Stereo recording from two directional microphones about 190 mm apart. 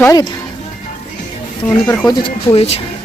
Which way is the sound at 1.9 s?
15° left (ahead or behind).